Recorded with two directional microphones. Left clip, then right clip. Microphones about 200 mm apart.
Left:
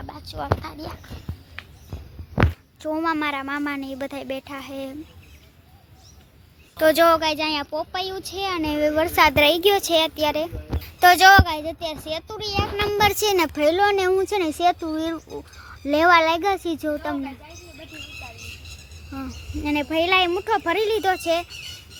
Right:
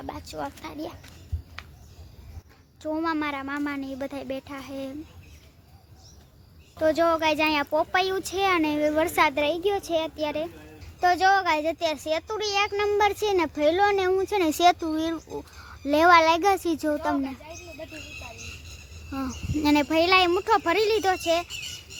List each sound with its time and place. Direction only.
0.0 s a sound: 20° right (ahead or behind)
0.6 s speech: 15° right (ahead or behind)
2.8 s speech: centre (ahead or behind)
6.7 s speech: centre (ahead or behind)
9.3 s speech: 15° left (ahead or behind)
14.5 s speech: 5° right (ahead or behind)
19.6 s speech: 20° right (ahead or behind); by 21.4 s centre (ahead or behind)